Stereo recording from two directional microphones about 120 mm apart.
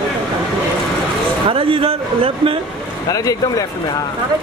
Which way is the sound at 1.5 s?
50° right (ahead or behind).